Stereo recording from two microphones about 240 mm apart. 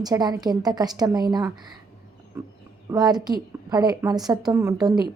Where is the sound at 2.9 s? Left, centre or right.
Centre.